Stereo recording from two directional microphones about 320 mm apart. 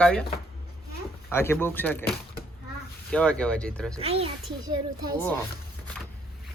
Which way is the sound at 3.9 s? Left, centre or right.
Centre.